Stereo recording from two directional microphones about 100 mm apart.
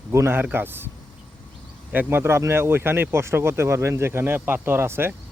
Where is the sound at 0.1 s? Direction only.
25° right (ahead or behind).